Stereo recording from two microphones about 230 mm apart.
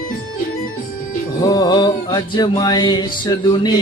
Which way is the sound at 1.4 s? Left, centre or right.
Centre.